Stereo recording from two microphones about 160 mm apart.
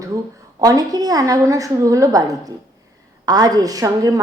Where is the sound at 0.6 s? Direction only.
25° right (ahead or behind).